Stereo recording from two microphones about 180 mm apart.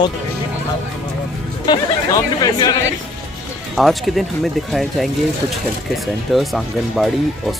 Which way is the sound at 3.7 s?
Centre (ahead or behind).